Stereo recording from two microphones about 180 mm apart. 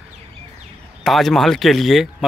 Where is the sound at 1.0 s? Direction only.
Centre (ahead or behind).